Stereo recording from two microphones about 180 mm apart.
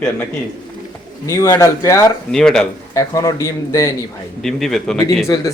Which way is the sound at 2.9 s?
20° left (ahead or behind).